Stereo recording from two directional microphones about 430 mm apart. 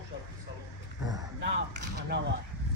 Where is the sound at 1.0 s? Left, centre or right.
Centre.